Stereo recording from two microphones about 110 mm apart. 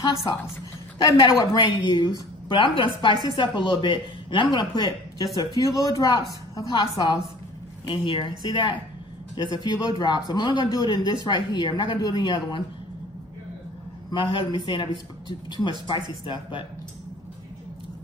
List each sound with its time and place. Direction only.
1.0 s a man's voice: 40° left (ahead or behind)
2.5 s a man's voice: 50° left (ahead or behind)
7.9 s a man's voice: 50° left (ahead or behind)
14.1 s speech: 45° left (ahead or behind)